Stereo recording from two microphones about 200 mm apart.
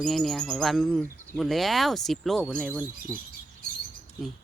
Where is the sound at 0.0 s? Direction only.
Centre (ahead or behind).